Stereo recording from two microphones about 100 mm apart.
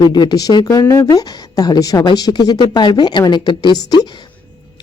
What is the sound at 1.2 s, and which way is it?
Speech, 45° left (ahead or behind).